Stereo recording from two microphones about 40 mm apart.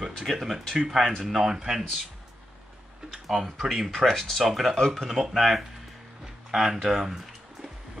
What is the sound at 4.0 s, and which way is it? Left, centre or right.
Speech, centre.